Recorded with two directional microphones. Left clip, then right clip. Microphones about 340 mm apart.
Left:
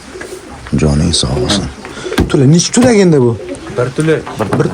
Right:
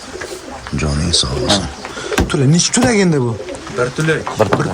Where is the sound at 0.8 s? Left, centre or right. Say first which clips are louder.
Left 3 dB; centre.